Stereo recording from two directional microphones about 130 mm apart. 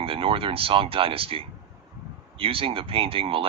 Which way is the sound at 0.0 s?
45° right (ahead or behind).